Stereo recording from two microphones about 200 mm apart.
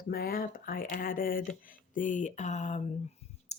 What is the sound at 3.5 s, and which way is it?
Clicking, 35° left (ahead or behind).